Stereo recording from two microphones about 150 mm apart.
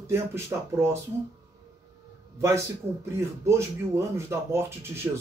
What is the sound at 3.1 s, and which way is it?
Speech, 20° right (ahead or behind).